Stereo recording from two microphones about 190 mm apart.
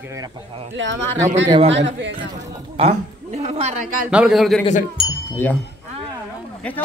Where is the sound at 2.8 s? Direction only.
35° right (ahead or behind).